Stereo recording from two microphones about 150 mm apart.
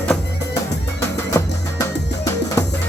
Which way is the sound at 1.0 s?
20° left (ahead or behind).